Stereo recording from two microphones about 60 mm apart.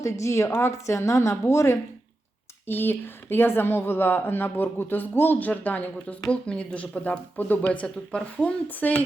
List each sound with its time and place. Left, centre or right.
0.0 s a woman's voice: left
2.6 s speech: left